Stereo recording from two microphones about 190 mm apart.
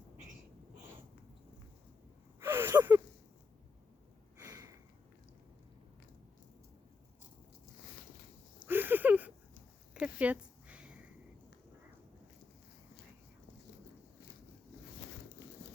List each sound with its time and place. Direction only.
2.4 s gasp: 10° right (ahead or behind)
4.4 s sniff: 15° right (ahead or behind)
8.6 s a sound: 10° right (ahead or behind)